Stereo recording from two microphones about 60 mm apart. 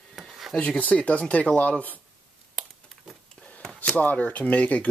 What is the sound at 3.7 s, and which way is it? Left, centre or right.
Speech, left.